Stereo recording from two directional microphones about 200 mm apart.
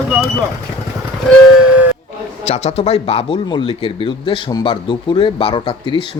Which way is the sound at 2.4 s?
30° left (ahead or behind).